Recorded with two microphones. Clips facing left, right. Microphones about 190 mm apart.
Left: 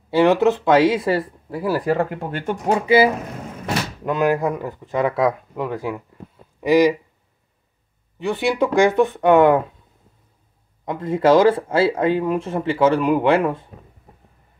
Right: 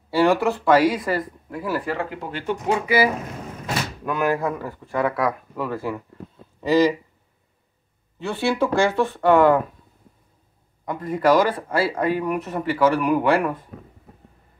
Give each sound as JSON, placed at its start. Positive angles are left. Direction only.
{"t": 0.1, "sound": "speech", "side_deg": 20}
{"t": 2.9, "sound": "speech", "side_deg": 25}
{"t": 8.2, "sound": "speech", "side_deg": 15}
{"t": 10.9, "sound": "speech", "side_deg": 25}